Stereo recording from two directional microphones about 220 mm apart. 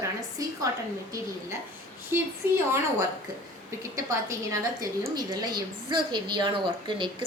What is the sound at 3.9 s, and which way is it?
A woman's voice, 15° right (ahead or behind).